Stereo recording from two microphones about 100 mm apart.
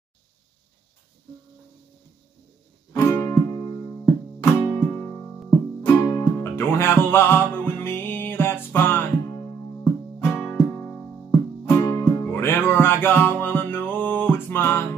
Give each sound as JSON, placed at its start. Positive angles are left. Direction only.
{"t": 2.9, "sound": "music", "side_deg": 30}
{"t": 4.4, "sound": "music", "side_deg": 20}
{"t": 5.9, "sound": "music", "side_deg": 35}